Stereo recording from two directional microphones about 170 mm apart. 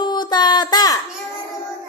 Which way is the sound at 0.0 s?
25° left (ahead or behind).